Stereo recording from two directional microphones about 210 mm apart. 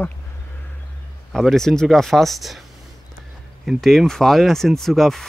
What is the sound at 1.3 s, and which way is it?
Speech, centre (ahead or behind).